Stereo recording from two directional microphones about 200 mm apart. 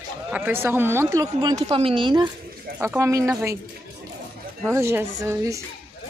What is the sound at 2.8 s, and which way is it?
Speech, 10° right (ahead or behind).